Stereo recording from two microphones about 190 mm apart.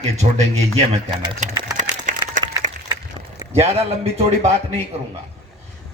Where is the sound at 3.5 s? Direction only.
30° right (ahead or behind).